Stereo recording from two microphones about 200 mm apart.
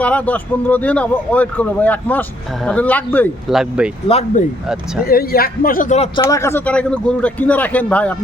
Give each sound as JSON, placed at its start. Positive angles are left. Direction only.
{"t": 0.0, "sound": "speech", "side_deg": 5}
{"t": 3.5, "sound": "speech", "side_deg": -5}
{"t": 4.1, "sound": "speech", "side_deg": 30}
{"t": 5.0, "sound": "a man's voice", "side_deg": 50}
{"t": 6.2, "sound": "speech", "side_deg": 15}